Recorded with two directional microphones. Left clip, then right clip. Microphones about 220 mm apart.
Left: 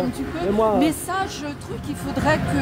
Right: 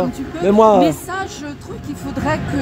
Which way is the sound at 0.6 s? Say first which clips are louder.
Right 9 dB; 45° right (ahead or behind).